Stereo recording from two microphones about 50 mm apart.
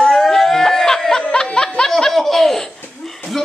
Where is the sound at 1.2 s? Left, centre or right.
Centre.